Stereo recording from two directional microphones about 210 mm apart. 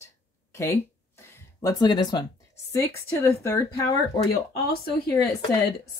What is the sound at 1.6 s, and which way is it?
Speech, 15° left (ahead or behind).